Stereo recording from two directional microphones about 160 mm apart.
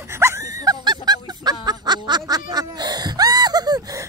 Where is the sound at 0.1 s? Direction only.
20° right (ahead or behind).